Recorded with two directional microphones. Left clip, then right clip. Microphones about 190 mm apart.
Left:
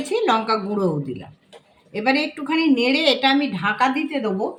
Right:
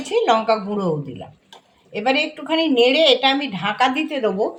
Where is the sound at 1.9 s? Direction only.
10° right (ahead or behind); by 4.3 s 30° right (ahead or behind).